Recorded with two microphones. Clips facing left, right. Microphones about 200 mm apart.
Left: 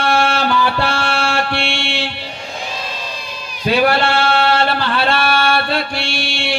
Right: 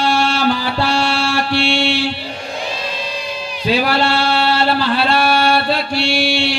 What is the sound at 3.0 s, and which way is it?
Speech, 45° left (ahead or behind).